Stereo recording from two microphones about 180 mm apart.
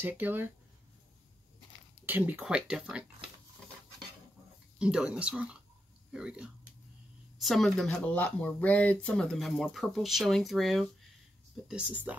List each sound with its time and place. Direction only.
0.0 s speech: 10° right (ahead or behind)
2.0 s speech: 10° right (ahead or behind)
4.7 s speech: 5° right (ahead or behind)